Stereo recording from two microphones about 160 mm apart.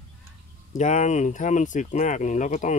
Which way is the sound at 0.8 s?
50° left (ahead or behind).